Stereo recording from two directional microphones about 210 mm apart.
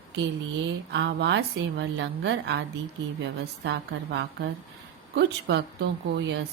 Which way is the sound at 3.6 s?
55° right (ahead or behind).